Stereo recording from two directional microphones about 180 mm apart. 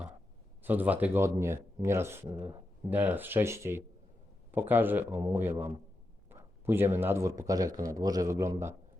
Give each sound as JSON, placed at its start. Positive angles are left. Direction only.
{"t": 0.6, "sound": "speech", "side_deg": -10}